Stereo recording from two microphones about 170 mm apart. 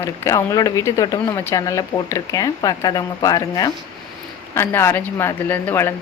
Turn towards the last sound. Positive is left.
turn(degrees=10)  # may be behind; listen again after turning